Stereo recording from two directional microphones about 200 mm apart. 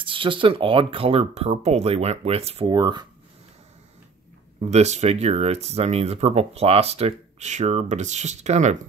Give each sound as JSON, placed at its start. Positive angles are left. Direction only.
{"t": 0.0, "sound": "speech", "side_deg": -25}
{"t": 4.6, "sound": "speech", "side_deg": -35}